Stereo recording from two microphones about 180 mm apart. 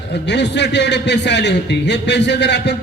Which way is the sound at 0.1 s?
70° left (ahead or behind).